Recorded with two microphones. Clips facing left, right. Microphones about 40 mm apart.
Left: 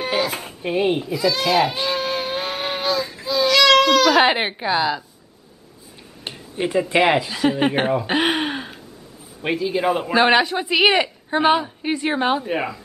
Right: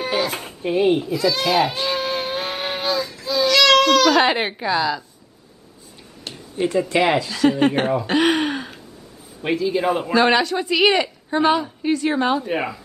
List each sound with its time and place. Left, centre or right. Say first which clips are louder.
0.0 s a sound: even; centre
0.6 s baby cry: right 3 dB; centre
6.2 s a man's voice: right 2 dB; left; by 10.1 s centre
10.1 s a woman's voice: left 1 dB; centre
12.4 s speech: even; centre